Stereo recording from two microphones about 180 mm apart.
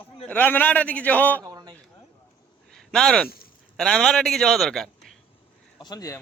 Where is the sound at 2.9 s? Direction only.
5° left (ahead or behind).